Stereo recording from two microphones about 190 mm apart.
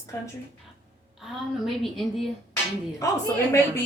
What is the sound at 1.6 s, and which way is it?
Speech, centre (ahead or behind).